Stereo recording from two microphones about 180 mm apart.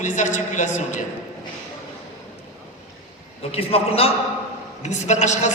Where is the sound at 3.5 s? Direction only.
35° left (ahead or behind).